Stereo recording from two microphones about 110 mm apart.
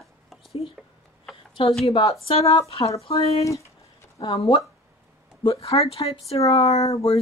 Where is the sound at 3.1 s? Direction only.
65° left (ahead or behind).